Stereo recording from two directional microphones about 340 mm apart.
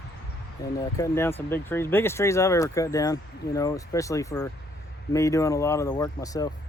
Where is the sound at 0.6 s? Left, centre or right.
Centre.